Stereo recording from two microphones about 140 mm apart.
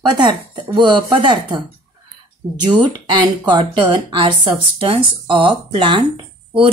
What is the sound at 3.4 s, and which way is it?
Speech, 35° right (ahead or behind).